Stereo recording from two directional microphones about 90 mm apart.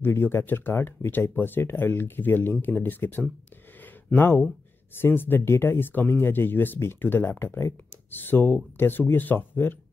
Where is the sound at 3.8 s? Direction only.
20° left (ahead or behind).